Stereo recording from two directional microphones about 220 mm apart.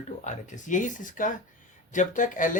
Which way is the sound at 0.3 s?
35° left (ahead or behind).